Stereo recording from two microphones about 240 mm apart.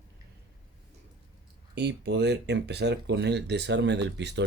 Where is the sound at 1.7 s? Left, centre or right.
Right.